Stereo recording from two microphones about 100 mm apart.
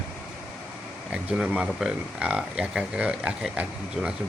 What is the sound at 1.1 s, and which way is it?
Speech, 10° right (ahead or behind).